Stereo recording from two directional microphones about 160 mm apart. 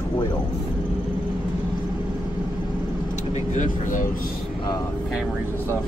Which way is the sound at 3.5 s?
55° left (ahead or behind).